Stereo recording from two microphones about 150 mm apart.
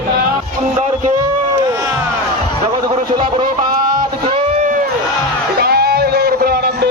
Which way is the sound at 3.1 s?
35° right (ahead or behind).